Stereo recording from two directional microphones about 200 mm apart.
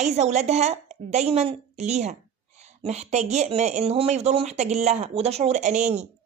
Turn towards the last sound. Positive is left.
turn(degrees=-35)  # may be behind; listen again after turning